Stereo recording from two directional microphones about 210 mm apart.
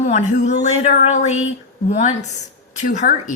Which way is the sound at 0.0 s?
35° left (ahead or behind).